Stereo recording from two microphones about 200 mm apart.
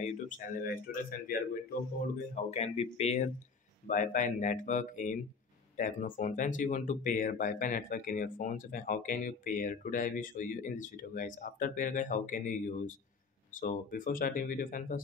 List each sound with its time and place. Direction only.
0.0 s speech: 40° left (ahead or behind)
0.9 s speech: 50° left (ahead or behind)
2.3 s speech: 35° left (ahead or behind)